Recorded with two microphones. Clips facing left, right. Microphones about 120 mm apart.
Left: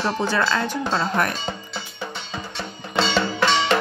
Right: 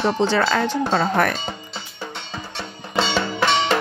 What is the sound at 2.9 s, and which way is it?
Music, 10° right (ahead or behind).